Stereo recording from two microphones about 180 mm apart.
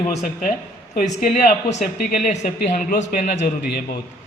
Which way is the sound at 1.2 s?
50° left (ahead or behind).